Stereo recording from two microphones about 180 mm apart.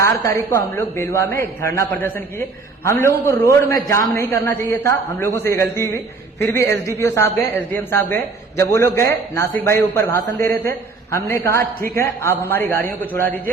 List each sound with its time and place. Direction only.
0.0 s a man's voice: 15° left (ahead or behind)